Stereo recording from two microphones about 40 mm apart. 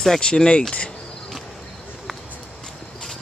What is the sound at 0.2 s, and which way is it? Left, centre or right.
Speech, left.